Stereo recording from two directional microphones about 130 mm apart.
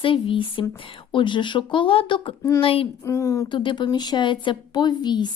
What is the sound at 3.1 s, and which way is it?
Speech, 20° left (ahead or behind).